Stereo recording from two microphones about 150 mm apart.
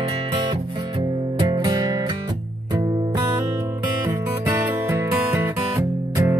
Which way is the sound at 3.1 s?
20° right (ahead or behind).